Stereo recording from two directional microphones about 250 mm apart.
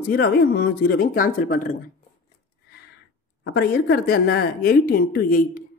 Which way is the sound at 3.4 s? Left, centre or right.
Left.